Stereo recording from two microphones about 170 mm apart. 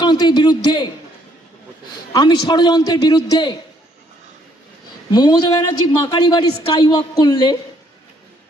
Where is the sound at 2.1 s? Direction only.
25° left (ahead or behind).